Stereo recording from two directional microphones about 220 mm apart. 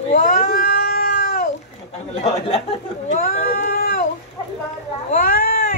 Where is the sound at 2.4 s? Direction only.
25° left (ahead or behind).